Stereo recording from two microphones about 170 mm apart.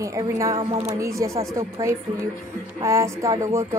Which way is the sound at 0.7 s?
15° right (ahead or behind).